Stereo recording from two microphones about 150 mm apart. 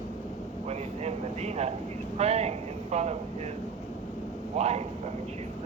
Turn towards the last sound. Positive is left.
turn(degrees=-45)  # may be behind; listen again after turning